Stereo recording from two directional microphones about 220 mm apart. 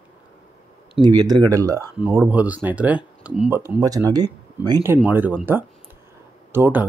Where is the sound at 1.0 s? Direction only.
20° right (ahead or behind).